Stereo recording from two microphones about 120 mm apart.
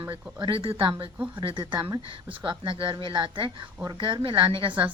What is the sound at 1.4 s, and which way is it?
A woman's voice, 40° right (ahead or behind).